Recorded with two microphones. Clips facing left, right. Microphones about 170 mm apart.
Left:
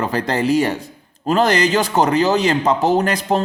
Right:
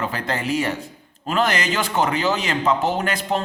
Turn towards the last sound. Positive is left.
turn(degrees=40)  # may be behind; listen again after turning